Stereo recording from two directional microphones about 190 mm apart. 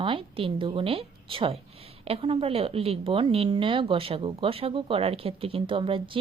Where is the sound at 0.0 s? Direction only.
25° right (ahead or behind).